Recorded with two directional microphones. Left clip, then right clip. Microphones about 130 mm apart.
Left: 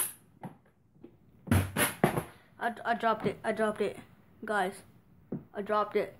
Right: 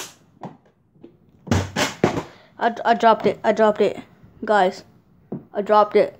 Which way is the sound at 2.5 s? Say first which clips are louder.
Right 13 dB; 70° right (ahead or behind).